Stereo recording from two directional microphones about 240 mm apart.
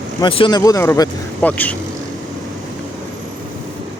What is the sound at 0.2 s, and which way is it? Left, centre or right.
Speech, left.